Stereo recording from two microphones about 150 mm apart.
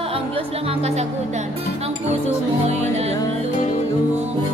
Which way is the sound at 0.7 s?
45° right (ahead or behind).